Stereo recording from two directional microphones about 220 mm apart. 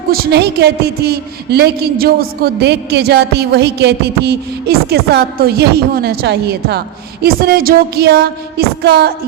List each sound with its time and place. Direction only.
0.1 s a woman's voice: 45° right (ahead or behind)